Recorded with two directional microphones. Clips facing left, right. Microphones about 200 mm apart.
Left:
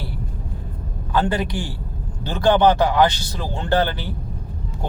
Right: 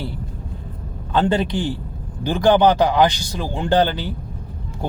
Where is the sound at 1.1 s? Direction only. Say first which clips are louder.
Right 3 dB; 25° right (ahead or behind).